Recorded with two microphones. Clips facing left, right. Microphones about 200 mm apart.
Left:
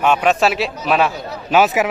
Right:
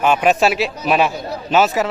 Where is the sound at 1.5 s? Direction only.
15° left (ahead or behind).